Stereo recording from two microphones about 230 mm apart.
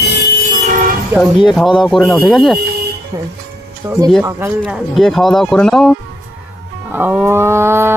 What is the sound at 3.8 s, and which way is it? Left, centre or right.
Speech, centre.